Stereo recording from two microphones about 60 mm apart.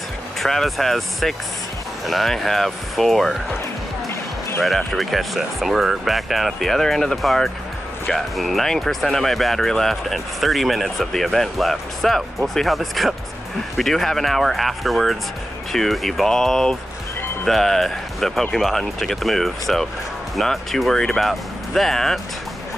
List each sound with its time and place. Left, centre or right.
0.4 s speech: centre
4.1 s music: left
4.6 s speech: centre